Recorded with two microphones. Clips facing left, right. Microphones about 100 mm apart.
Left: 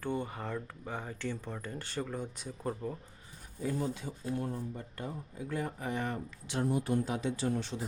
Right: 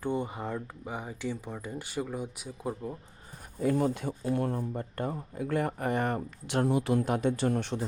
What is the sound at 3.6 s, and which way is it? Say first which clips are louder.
Speech: right 7 dB; 70° right (ahead or behind).